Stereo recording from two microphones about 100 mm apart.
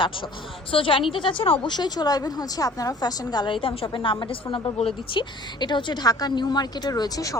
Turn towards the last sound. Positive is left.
turn(degrees=35)  # may be behind; listen again after turning